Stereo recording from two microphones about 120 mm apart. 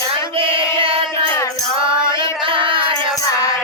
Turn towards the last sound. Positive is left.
turn(degrees=-45)  # may be behind; listen again after turning